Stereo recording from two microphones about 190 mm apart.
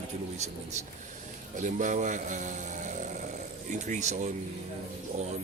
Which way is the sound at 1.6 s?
40° right (ahead or behind).